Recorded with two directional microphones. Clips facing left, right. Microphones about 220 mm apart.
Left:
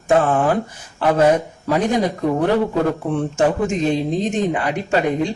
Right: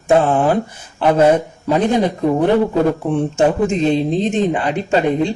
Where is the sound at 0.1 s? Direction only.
25° right (ahead or behind).